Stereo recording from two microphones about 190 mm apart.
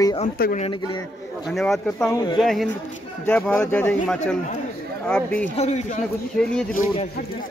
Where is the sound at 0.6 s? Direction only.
25° left (ahead or behind).